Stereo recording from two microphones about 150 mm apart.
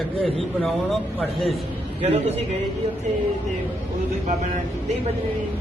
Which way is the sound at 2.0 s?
45° right (ahead or behind).